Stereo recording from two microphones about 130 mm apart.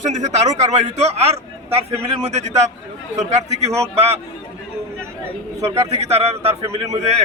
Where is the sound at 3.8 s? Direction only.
50° right (ahead or behind).